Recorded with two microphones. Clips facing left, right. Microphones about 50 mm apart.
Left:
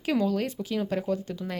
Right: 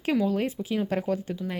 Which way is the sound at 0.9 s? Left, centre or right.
Right.